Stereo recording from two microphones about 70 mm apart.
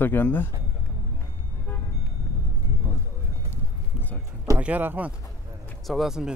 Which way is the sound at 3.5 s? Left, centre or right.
Left.